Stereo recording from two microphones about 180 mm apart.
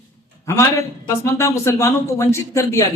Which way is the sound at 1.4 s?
15° left (ahead or behind).